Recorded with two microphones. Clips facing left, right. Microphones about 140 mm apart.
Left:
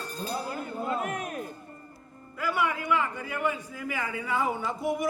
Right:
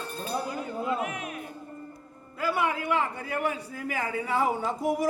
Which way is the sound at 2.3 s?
30° right (ahead or behind).